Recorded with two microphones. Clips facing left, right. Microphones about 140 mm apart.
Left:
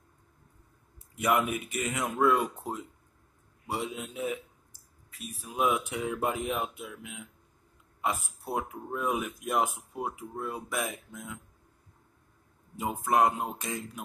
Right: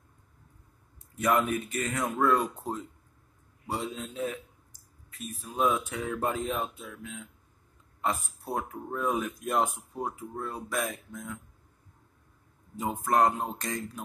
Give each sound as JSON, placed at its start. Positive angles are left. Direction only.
{"t": 1.1, "sound": "speech", "side_deg": 15}
{"t": 5.1, "sound": "speech", "side_deg": 0}
{"t": 5.5, "sound": "speech", "side_deg": 15}
{"t": 12.7, "sound": "speech", "side_deg": 10}